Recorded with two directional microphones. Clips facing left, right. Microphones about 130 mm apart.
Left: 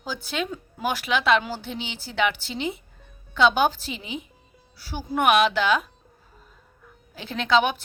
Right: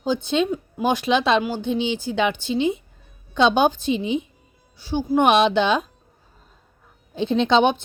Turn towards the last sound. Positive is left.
turn(degrees=-25)  # may be behind; listen again after turning